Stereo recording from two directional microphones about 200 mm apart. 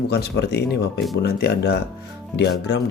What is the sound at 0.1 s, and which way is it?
Speech, 55° left (ahead or behind).